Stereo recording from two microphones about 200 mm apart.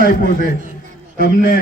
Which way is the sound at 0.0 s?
45° left (ahead or behind).